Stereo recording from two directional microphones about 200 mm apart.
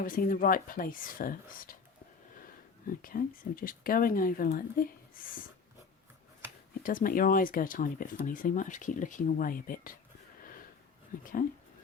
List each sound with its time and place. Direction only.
0.0 s speech: 45° left (ahead or behind)
2.8 s speech: 45° left (ahead or behind)
6.8 s speech: 45° left (ahead or behind)
11.2 s speech: 45° left (ahead or behind)